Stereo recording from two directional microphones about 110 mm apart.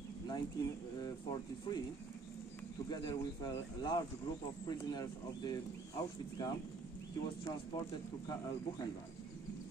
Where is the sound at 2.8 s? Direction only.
40° left (ahead or behind).